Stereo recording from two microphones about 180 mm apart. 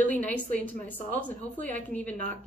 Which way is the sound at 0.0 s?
10° left (ahead or behind).